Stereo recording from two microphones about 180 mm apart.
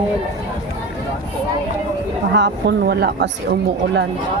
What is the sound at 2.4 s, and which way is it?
Speech, 70° right (ahead or behind).